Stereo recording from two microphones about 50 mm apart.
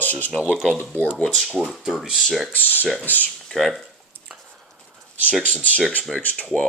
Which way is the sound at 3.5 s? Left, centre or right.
Centre.